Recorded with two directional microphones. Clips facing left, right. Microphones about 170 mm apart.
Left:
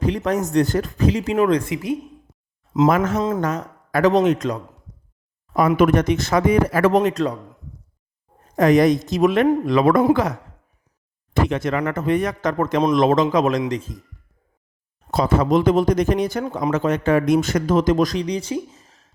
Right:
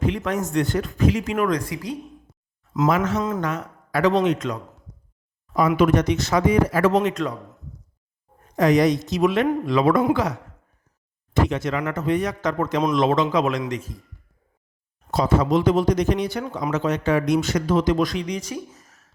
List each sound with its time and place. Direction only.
0.0 s speech: 40° left (ahead or behind)
2.9 s a man's voice: 50° left (ahead or behind)
3.2 s a man's voice: 25° left (ahead or behind)
3.4 s a man's voice: 40° left (ahead or behind)
5.5 s a man's voice: 55° left (ahead or behind)
7.0 s speech: 35° left (ahead or behind)
8.5 s a man's voice: 55° left (ahead or behind)
11.4 s a man's voice: 55° left (ahead or behind)
13.6 s a man's voice: 30° left (ahead or behind)
15.1 s a man's voice: 55° left (ahead or behind); by 19.1 s 30° left (ahead or behind)